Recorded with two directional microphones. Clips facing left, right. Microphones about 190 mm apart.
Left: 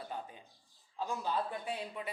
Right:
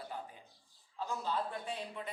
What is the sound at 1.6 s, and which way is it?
Speech, 10° left (ahead or behind).